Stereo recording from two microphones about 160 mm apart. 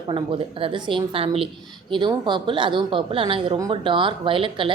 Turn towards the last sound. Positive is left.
turn(degrees=-35)  # may be behind; listen again after turning